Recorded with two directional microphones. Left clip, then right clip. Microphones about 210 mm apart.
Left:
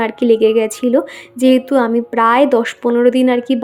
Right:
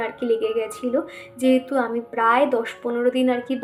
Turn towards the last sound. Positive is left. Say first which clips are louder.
# left 8 dB
turn(degrees=45)  # may be behind; listen again after turning